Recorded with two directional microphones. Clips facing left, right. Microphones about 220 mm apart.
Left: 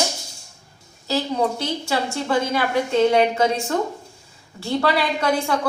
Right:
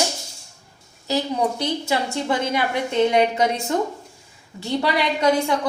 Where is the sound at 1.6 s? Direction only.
20° right (ahead or behind).